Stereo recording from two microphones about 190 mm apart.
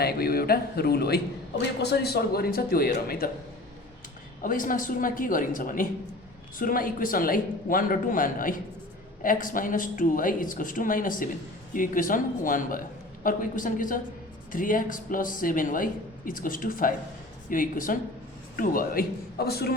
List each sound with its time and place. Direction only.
0.0 s speech: 55° left (ahead or behind)
4.4 s speech: 45° left (ahead or behind)